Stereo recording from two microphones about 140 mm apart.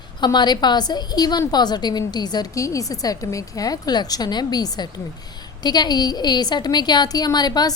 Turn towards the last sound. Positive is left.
turn(degrees=30)  # may be behind; listen again after turning